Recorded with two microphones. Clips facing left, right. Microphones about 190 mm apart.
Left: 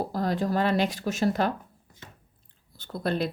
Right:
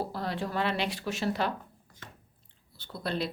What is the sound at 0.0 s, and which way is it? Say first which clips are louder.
Speech: left 6 dB; 45° left (ahead or behind).